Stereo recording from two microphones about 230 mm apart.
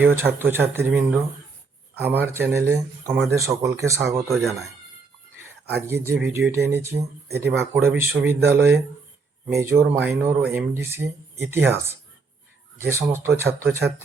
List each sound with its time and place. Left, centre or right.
0.0 s speech: centre
5.9 s speech: centre
12.8 s speech: centre